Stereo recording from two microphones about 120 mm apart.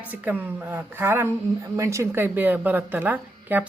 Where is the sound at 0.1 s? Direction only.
15° right (ahead or behind).